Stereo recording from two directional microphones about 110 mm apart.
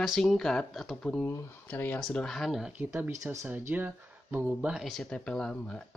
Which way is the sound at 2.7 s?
20° right (ahead or behind).